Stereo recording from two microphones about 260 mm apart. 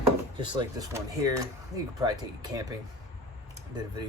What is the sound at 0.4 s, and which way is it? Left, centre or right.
Speech, centre.